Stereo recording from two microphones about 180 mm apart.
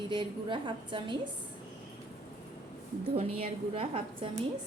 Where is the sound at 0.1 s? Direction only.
25° right (ahead or behind).